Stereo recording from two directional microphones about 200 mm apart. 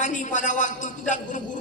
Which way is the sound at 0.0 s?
40° left (ahead or behind).